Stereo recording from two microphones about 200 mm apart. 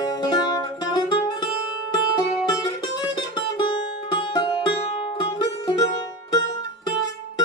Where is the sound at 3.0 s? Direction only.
20° left (ahead or behind).